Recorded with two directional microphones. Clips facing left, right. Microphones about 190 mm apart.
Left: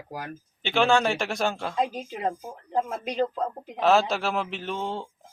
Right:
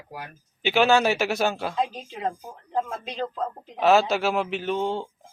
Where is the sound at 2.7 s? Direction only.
10° left (ahead or behind).